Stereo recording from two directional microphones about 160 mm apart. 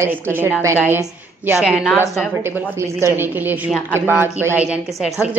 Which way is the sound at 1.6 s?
Centre (ahead or behind).